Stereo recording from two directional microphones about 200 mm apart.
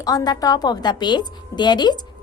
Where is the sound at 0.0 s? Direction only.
20° left (ahead or behind).